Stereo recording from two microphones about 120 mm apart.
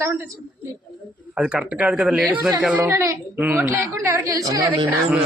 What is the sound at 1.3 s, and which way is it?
A man's voice, 10° right (ahead or behind).